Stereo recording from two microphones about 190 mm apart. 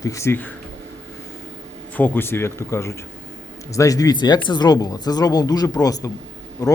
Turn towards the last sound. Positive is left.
turn(degrees=20)  # may be behind; listen again after turning